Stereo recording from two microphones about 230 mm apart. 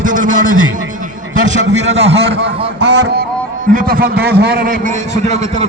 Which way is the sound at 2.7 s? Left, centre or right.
Right.